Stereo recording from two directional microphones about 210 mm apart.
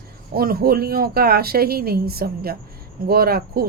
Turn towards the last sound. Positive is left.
turn(degrees=-45)  # may be behind; listen again after turning